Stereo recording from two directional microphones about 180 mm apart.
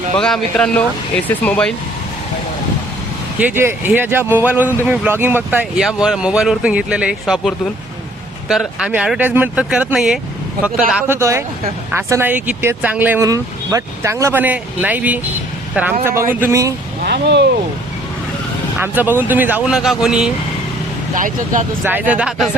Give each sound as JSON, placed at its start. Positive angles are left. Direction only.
{"t": 0.2, "sound": "speech", "side_deg": 5}
{"t": 3.3, "sound": "speech", "side_deg": -10}
{"t": 11.2, "sound": "speech", "side_deg": -15}
{"t": 17.0, "sound": "speech", "side_deg": -70}
{"t": 18.8, "sound": "speech", "side_deg": -10}
{"t": 21.2, "sound": "speech", "side_deg": -45}
{"t": 21.8, "sound": "speech", "side_deg": -10}